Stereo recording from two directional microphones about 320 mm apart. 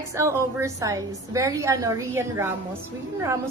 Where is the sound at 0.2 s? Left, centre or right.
Centre.